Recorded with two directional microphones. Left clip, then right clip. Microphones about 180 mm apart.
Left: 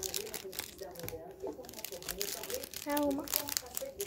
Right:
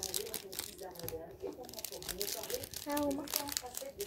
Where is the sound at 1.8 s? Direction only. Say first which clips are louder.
Left 1 dB; 10° left (ahead or behind).